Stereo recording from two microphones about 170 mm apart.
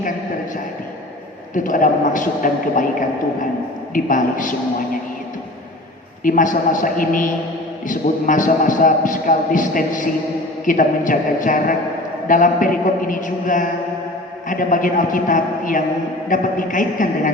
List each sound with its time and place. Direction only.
1.5 s a man's voice: 50° left (ahead or behind)
3.9 s a man's voice: 50° left (ahead or behind)
6.2 s a man's voice: 50° left (ahead or behind)